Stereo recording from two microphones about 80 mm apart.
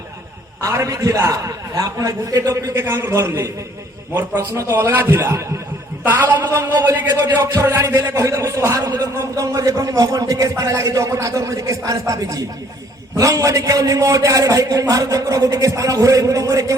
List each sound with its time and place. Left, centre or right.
0.6 s a man's voice: right
2.8 s a man's voice: right
6.1 s a man's voice: right
6.7 s a man's voice: right
8.8 s a man's voice: right
9.1 s a man's voice: right